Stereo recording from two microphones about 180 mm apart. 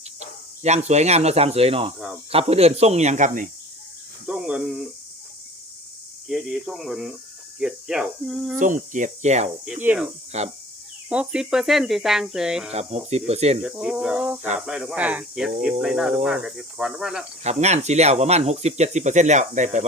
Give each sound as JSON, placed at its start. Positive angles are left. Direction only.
{"t": 0.6, "sound": "speech", "side_deg": -40}
{"t": 4.3, "sound": "speech", "side_deg": -5}
{"t": 6.2, "sound": "speech", "side_deg": 0}
{"t": 8.5, "sound": "cricket", "side_deg": -45}
{"t": 9.8, "sound": "speech", "side_deg": -10}
{"t": 10.3, "sound": "speech", "side_deg": -35}
{"t": 11.1, "sound": "speech", "side_deg": -5}
{"t": 12.7, "sound": "speech", "side_deg": -35}
{"t": 13.6, "sound": "speech", "side_deg": -5}
{"t": 17.4, "sound": "speech", "side_deg": -40}